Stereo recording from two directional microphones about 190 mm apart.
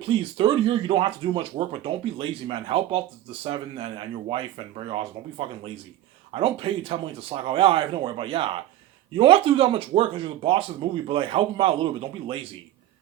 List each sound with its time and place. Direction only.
0.0 s speech: 30° right (ahead or behind)